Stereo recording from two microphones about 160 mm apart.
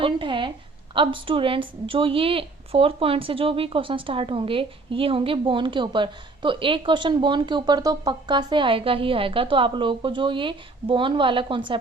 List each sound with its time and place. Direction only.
0.0 s a woman's voice: 30° right (ahead or behind)